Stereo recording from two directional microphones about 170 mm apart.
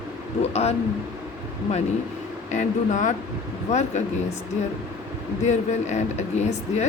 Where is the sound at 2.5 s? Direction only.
45° left (ahead or behind).